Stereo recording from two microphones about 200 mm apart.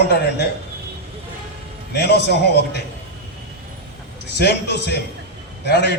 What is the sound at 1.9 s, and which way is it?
Speech, 55° left (ahead or behind).